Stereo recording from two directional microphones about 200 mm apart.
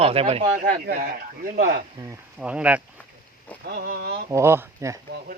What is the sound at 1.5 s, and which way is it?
Speech, 45° right (ahead or behind).